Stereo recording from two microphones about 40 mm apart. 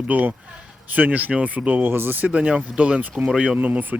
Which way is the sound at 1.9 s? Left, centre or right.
Right.